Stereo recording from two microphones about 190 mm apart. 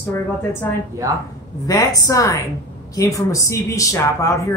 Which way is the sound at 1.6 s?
20° left (ahead or behind).